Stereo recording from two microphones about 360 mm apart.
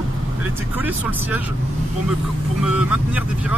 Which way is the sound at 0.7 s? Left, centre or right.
Centre.